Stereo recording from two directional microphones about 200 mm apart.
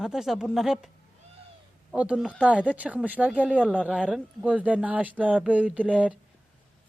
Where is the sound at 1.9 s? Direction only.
5° right (ahead or behind).